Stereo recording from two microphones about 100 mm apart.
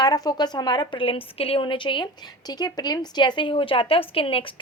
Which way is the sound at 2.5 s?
45° left (ahead or behind).